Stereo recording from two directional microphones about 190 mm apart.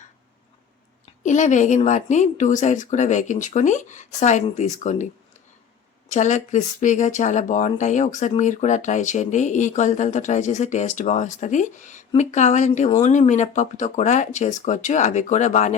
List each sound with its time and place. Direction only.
1.2 s speech: 40° left (ahead or behind)
6.1 s speech: 40° left (ahead or behind)